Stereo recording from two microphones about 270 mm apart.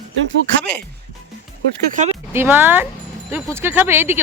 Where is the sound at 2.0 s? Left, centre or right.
Right.